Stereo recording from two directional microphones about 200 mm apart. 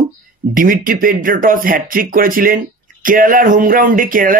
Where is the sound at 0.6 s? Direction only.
45° right (ahead or behind).